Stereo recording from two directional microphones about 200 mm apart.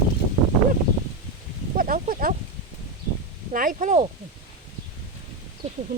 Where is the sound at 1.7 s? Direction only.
45° right (ahead or behind).